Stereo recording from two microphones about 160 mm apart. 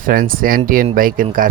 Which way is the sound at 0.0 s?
60° right (ahead or behind).